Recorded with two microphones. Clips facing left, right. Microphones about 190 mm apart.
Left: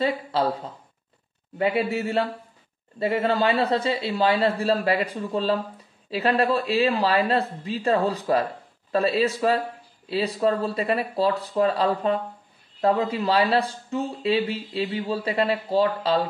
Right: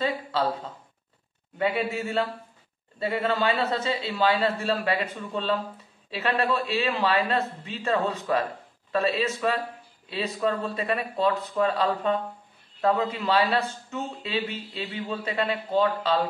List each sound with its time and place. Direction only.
1.6 s speech: 35° left (ahead or behind)